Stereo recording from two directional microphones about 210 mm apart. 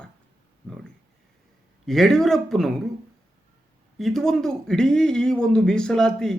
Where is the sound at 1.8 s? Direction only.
Centre (ahead or behind).